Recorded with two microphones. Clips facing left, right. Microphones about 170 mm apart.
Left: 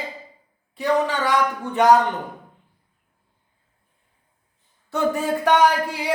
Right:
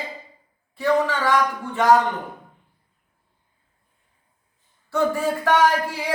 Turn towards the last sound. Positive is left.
turn(degrees=15)  # may be behind; listen again after turning